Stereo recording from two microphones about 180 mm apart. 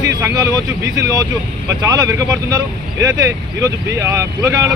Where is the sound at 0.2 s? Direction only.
20° right (ahead or behind).